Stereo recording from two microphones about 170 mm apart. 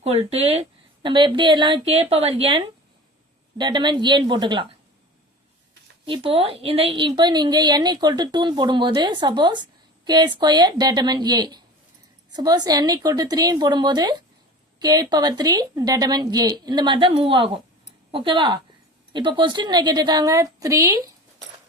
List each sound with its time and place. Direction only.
0.0 s a woman's voice: 35° right (ahead or behind)
6.1 s a woman's voice: 35° right (ahead or behind); by 21.0 s 20° right (ahead or behind)